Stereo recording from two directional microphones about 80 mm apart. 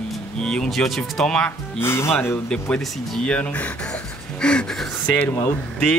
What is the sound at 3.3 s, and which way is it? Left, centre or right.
Speech, centre.